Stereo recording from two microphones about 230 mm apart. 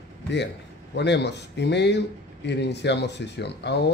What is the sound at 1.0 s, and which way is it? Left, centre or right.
Speech, left.